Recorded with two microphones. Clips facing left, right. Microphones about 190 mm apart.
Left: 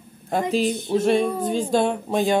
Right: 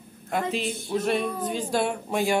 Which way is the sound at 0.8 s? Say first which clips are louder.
Left 4 dB; 25° left (ahead or behind).